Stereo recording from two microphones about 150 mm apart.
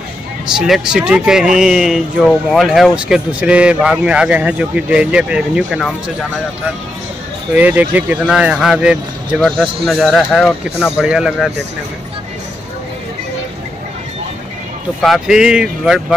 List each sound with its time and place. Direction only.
0.6 s speech: 5° right (ahead or behind)
7.5 s speech: 10° right (ahead or behind)
15.0 s speech: centre (ahead or behind)